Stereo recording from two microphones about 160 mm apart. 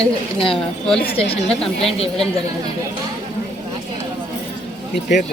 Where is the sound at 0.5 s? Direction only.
5° left (ahead or behind).